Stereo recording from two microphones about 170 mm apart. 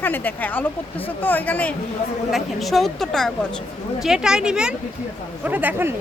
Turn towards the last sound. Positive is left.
turn(degrees=-10)  # may be behind; listen again after turning